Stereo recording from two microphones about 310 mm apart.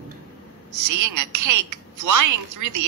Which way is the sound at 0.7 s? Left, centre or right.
Right.